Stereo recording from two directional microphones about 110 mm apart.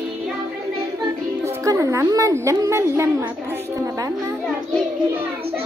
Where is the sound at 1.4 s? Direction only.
25° right (ahead or behind).